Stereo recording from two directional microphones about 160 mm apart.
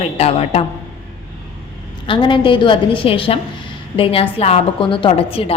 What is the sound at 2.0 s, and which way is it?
A woman's voice, 30° left (ahead or behind).